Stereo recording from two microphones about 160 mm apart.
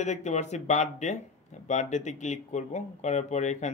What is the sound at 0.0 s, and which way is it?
Speech, 45° left (ahead or behind).